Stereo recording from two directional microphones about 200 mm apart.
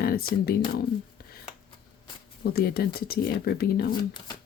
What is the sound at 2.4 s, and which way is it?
Speech, 50° left (ahead or behind).